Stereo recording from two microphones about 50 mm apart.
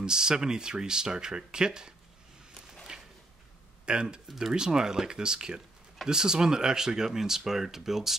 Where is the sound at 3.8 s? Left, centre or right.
Centre.